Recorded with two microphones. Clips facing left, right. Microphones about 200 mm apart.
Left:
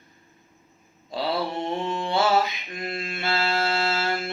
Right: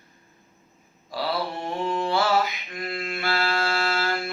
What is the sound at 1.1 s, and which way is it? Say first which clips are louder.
Mantra: left 1 dB; 25° left (ahead or behind).